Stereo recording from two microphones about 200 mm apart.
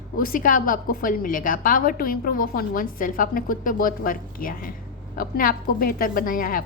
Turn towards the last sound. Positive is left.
turn(degrees=45)  # may be behind; listen again after turning